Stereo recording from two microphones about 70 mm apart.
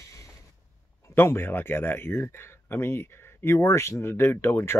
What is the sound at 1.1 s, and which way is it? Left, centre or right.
Speech, left.